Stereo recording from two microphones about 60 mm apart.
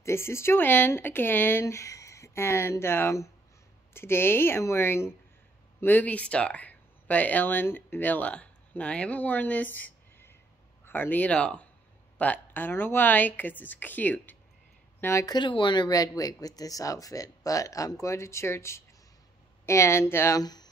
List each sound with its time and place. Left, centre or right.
0.0 s a woman's voice: left
5.9 s speech: left
12.2 s a woman's voice: left
15.9 s speech: left
18.0 s speech: left
20.3 s speech: left